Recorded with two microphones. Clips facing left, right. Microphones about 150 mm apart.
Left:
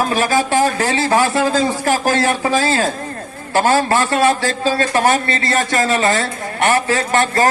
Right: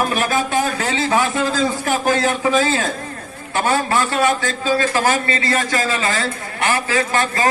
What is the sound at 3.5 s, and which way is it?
Speech, 30° left (ahead or behind).